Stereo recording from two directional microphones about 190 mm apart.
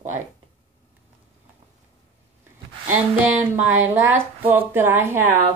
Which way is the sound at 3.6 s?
10° right (ahead or behind).